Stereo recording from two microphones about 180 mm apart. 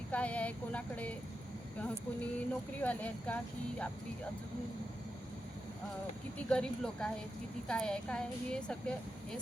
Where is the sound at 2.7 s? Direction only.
10° left (ahead or behind).